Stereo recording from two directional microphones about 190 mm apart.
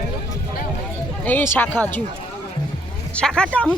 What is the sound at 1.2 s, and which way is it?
Speech, 10° left (ahead or behind).